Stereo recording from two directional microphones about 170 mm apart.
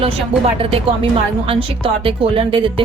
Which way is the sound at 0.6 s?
35° right (ahead or behind).